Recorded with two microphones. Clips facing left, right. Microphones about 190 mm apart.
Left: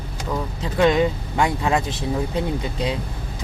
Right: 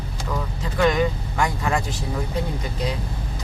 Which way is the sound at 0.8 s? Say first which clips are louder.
Left 3 dB; 25° left (ahead or behind).